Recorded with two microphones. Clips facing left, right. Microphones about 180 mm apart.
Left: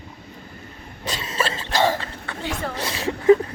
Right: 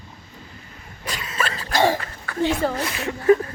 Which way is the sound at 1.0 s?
25° left (ahead or behind).